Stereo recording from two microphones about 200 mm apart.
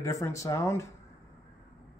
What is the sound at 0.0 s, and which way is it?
Speech, 15° left (ahead or behind).